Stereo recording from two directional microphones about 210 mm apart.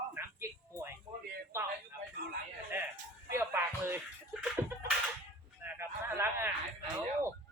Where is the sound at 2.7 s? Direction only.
10° right (ahead or behind).